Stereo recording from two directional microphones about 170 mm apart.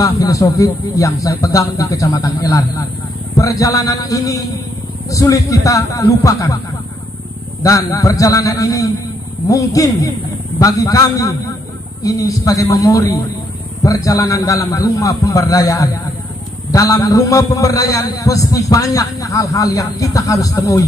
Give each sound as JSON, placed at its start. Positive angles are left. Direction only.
{"t": 0.0, "sound": "a man's voice", "side_deg": 20}
{"t": 7.6, "sound": "a man's voice", "side_deg": 20}